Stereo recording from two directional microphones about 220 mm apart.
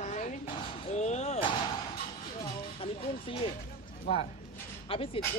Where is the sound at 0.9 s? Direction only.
30° left (ahead or behind).